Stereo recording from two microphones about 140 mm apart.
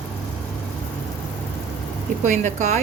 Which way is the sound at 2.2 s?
60° right (ahead or behind).